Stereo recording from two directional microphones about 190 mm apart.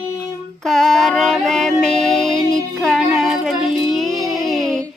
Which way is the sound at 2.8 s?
Centre (ahead or behind).